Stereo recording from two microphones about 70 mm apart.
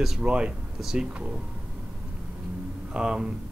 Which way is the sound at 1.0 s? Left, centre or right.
Centre.